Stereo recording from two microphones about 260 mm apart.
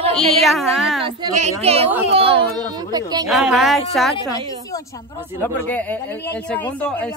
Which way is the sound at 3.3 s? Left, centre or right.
Centre.